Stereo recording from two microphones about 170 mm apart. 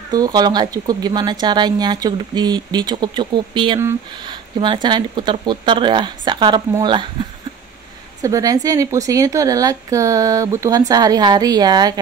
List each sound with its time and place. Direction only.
0.1 s speech: 25° right (ahead or behind)
8.2 s speech: 20° right (ahead or behind)